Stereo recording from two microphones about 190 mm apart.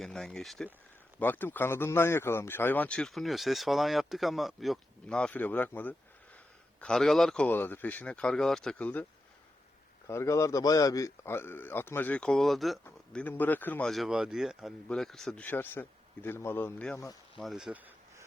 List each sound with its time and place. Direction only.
0.0 s speech: 5° left (ahead or behind)
10.1 s speech: 15° left (ahead or behind)
17.0 s speech: 20° left (ahead or behind)
17.4 s a sound: centre (ahead or behind)